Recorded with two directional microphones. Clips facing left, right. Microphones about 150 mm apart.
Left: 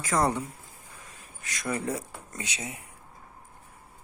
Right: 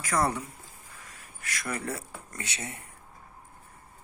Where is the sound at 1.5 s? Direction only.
20° left (ahead or behind).